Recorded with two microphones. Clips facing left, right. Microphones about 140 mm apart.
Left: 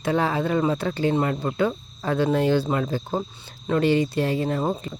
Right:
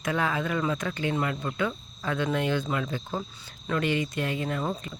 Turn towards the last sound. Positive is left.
turn(degrees=35)  # may be behind; listen again after turning